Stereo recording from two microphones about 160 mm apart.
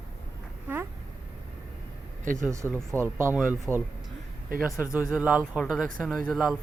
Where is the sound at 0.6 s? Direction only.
15° right (ahead or behind).